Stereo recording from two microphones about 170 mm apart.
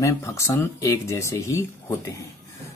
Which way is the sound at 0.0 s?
15° left (ahead or behind).